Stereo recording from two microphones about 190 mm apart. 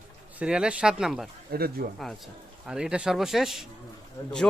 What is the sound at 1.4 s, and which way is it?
Speech, 55° right (ahead or behind).